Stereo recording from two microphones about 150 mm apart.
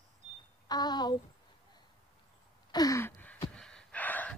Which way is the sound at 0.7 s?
25° left (ahead or behind).